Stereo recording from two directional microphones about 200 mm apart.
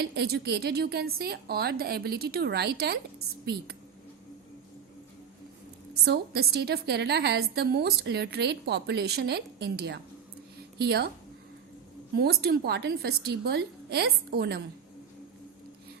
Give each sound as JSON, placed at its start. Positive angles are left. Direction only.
{"t": 0.0, "sound": "a woman's voice", "side_deg": -55}
{"t": 6.1, "sound": "a woman's voice", "side_deg": -55}
{"t": 12.1, "sound": "a woman's voice", "side_deg": -50}